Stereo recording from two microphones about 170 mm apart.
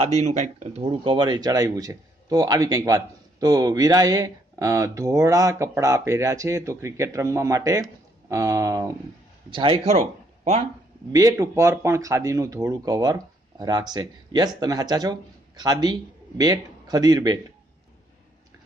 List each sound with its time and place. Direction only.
0.0 s speech: 40° right (ahead or behind); by 8.9 s 20° right (ahead or behind)
9.5 s speech: 30° right (ahead or behind)
11.1 s speech: 20° right (ahead or behind)